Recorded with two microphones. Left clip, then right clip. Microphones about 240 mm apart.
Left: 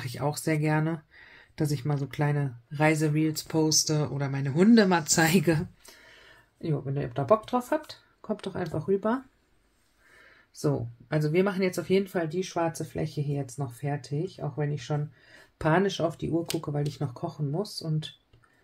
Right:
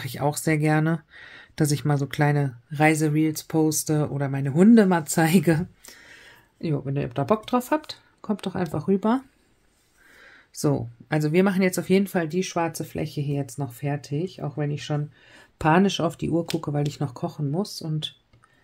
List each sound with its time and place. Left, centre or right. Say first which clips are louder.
0.0 s speech: right 5 dB; right
6.6 s speech: right 4 dB; right
10.5 s speech: right 4 dB; right